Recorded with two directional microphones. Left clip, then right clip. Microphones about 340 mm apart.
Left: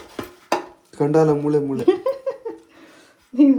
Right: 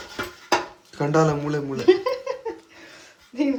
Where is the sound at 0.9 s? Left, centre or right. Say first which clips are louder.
Left 4 dB; centre.